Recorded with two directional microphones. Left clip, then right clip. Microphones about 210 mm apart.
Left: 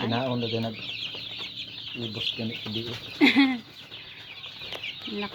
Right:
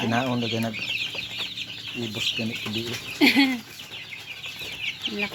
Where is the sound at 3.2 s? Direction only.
20° left (ahead or behind).